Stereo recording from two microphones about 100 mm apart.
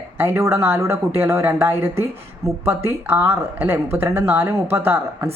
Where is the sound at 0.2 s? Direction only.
25° right (ahead or behind).